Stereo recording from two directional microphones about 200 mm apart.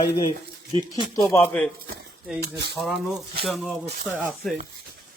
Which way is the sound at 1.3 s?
5° left (ahead or behind).